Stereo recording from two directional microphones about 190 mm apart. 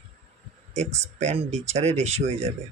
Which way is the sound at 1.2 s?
35° right (ahead or behind).